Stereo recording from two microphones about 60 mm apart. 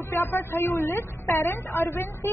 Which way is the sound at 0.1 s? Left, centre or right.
Left.